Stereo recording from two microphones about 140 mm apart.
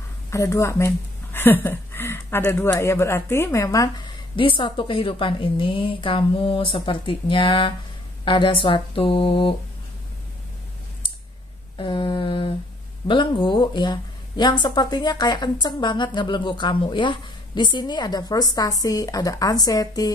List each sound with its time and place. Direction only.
0.3 s a woman's voice: 20° left (ahead or behind)
4.4 s speech: 35° left (ahead or behind)
11.7 s humming: 35° left (ahead or behind)
13.1 s speech: 35° left (ahead or behind)